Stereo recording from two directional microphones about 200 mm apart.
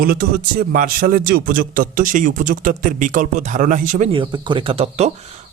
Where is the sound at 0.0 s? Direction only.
45° right (ahead or behind).